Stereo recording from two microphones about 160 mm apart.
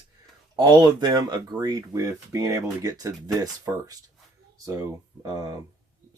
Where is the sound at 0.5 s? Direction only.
25° right (ahead or behind).